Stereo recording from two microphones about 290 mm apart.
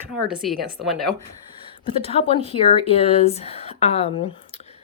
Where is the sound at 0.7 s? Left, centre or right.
Centre.